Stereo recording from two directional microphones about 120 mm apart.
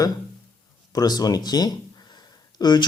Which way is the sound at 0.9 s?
35° left (ahead or behind).